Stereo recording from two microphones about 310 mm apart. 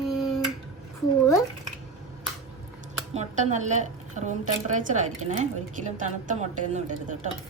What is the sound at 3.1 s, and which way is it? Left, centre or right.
A woman's voice, right.